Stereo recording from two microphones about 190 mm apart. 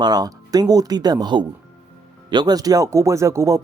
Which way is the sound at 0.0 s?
20° right (ahead or behind).